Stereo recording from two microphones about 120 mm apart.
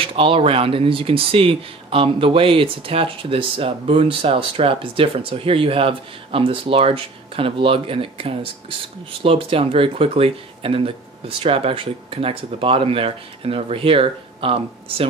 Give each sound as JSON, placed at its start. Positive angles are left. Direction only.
{"t": 0.0, "sound": "speech", "side_deg": -50}